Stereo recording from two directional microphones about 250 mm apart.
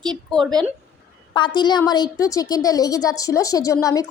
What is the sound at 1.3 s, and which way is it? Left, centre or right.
A woman's voice, centre.